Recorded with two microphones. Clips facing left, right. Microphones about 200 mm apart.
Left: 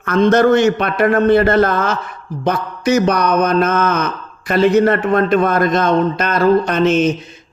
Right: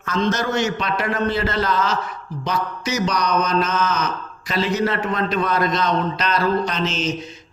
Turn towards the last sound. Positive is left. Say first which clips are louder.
# left 10 dB
turn(degrees=55)  # may be behind; listen again after turning